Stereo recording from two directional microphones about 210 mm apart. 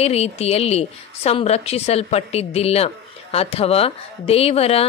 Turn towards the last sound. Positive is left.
turn(degrees=30)  # may be behind; listen again after turning